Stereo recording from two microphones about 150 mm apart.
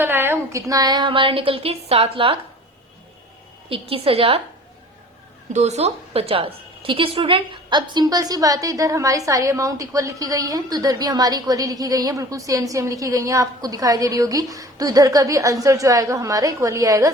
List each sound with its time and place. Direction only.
0.0 s a woman's voice: 15° right (ahead or behind); by 2.4 s 35° right (ahead or behind)
3.7 s a woman's voice: 40° right (ahead or behind)
5.5 s a woman's voice: 45° right (ahead or behind); by 17.1 s 20° right (ahead or behind)